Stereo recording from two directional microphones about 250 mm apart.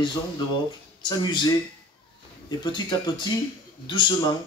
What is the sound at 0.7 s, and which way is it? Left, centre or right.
Speech, centre.